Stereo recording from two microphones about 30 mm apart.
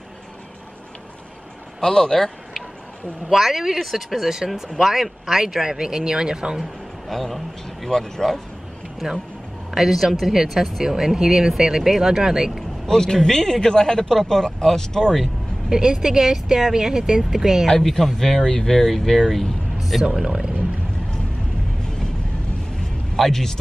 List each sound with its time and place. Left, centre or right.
1.8 s speech: left
3.3 s speech: centre
7.1 s speech: centre
9.8 s speech: centre
12.8 s speech: centre
15.7 s speech: centre
17.8 s speech: centre
19.8 s speech: centre
23.1 s speech: centre